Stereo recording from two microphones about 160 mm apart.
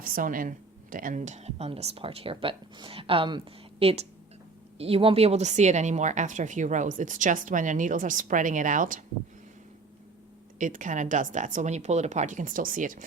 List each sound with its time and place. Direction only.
0.0 s speech: 60° right (ahead or behind)
10.6 s speech: 50° right (ahead or behind)